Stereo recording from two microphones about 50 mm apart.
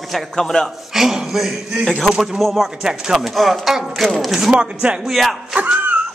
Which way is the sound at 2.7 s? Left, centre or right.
Centre.